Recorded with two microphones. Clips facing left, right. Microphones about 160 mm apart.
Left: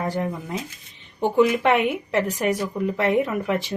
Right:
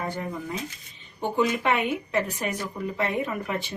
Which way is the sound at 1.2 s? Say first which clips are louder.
Left 6 dB; 75° left (ahead or behind).